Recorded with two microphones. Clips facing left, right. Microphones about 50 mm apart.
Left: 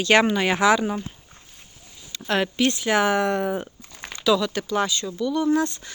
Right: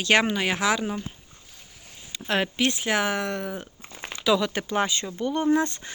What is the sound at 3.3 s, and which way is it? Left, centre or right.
Speech, centre.